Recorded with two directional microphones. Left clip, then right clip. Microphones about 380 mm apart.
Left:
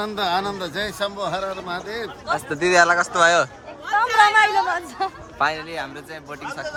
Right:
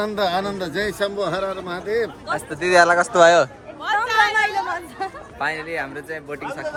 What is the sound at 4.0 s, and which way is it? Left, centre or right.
Chatter, left.